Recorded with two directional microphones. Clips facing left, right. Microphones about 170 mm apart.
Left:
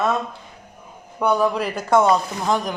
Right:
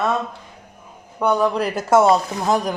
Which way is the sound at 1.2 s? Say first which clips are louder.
Right 1 dB; 10° left (ahead or behind).